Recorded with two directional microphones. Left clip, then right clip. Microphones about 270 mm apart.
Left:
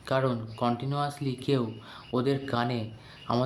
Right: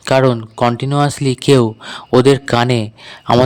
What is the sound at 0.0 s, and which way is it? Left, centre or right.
Speech, right.